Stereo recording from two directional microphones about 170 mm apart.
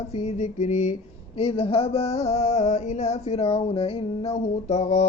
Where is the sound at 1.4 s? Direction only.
35° left (ahead or behind).